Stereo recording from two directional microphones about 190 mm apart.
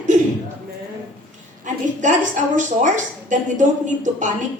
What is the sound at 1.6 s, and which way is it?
A woman's voice, 40° right (ahead or behind).